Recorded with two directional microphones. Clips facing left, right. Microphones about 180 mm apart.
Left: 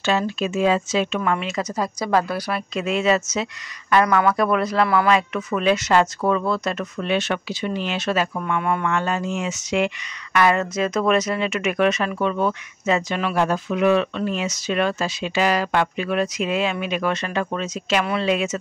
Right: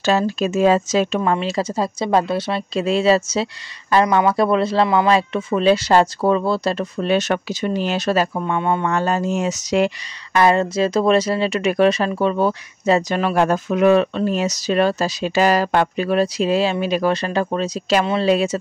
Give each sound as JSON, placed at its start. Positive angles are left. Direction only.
{"t": 0.0, "sound": "speech", "side_deg": -40}